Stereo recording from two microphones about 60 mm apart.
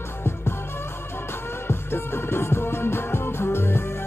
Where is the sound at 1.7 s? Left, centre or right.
Left.